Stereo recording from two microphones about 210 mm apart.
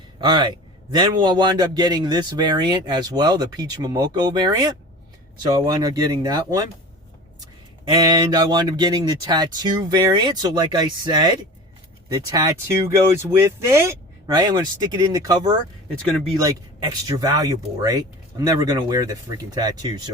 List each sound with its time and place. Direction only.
0.3 s a man's voice: 20° right (ahead or behind)
7.9 s a man's voice: 20° right (ahead or behind)